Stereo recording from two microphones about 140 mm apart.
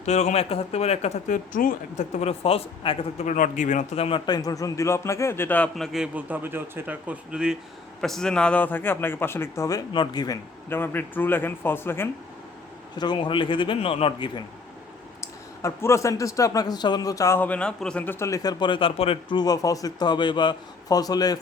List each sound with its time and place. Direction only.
0.0 s a woman's voice: 55° left (ahead or behind)
1.5 s a woman's voice: 65° left (ahead or behind); by 3.2 s 40° left (ahead or behind)
3.2 s speech: 65° left (ahead or behind); by 4.2 s 45° left (ahead or behind)
4.3 s a man's voice: 25° left (ahead or behind); by 5.7 s 10° left (ahead or behind)
5.7 s a man's voice: centre (ahead or behind); by 10.3 s 30° left (ahead or behind)
10.7 s a man's voice: 15° left (ahead or behind)
13.0 s speech: 35° left (ahead or behind)
15.2 s a man's voice: 20° left (ahead or behind)